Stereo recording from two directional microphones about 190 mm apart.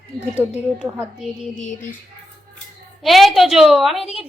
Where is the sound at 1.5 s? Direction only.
40° left (ahead or behind).